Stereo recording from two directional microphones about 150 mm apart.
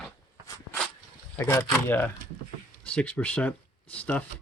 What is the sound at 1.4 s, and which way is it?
Speech, 15° left (ahead or behind).